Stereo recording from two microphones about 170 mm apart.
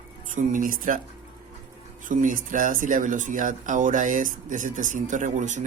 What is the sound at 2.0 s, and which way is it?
Speech, 50° right (ahead or behind).